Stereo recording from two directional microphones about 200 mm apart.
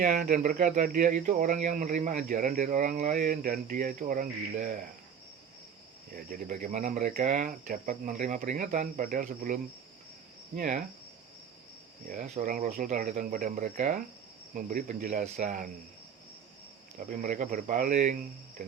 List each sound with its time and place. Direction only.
0.0 s speech: 40° right (ahead or behind)
6.1 s speech: 45° right (ahead or behind)
12.0 s speech: 40° right (ahead or behind)
17.1 s speech: 40° right (ahead or behind)